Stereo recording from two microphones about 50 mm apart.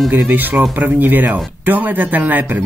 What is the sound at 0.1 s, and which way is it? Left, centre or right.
Speech, right.